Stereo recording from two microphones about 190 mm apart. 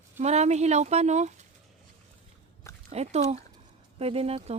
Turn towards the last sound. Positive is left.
turn(degrees=-30)  # may be behind; listen again after turning